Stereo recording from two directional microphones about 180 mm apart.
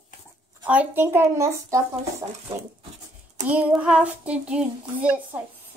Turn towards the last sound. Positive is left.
turn(degrees=-10)  # may be behind; listen again after turning